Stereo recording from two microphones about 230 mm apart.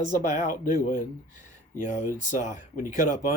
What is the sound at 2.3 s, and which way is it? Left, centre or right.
Speech, left.